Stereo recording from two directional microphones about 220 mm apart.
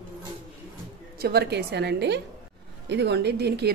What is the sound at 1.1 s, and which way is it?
Speech, 45° right (ahead or behind).